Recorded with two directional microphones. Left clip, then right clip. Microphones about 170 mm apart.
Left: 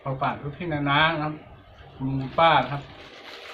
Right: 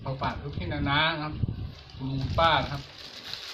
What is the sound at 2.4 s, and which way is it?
Speech, 5° right (ahead or behind).